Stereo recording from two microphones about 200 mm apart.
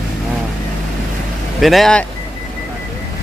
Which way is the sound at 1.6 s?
Centre (ahead or behind).